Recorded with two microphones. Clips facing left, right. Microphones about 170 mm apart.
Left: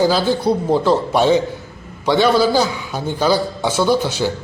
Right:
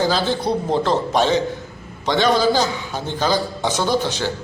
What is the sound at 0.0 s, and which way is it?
A man's voice, 10° left (ahead or behind).